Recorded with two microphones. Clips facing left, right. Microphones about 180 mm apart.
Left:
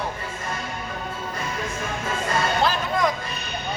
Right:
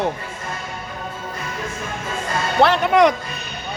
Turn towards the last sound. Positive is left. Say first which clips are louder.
# right 8 dB
turn(degrees=-70)  # may be behind; listen again after turning